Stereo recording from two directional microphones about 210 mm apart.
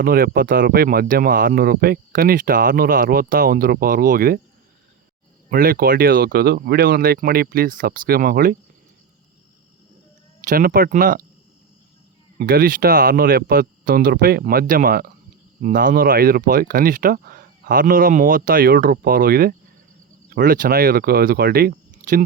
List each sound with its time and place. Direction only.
0.0 s speech: 45° right (ahead or behind)
5.5 s speech: 45° right (ahead or behind)
10.4 s speech: 40° right (ahead or behind)
12.4 s speech: 45° right (ahead or behind)